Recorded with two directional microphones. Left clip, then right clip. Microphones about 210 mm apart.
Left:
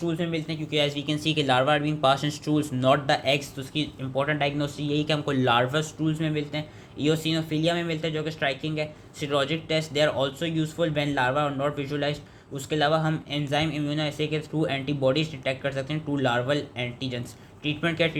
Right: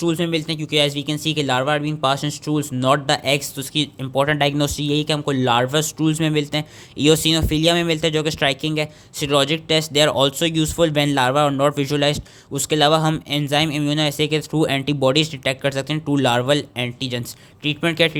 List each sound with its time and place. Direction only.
0.0 s speech: 50° right (ahead or behind)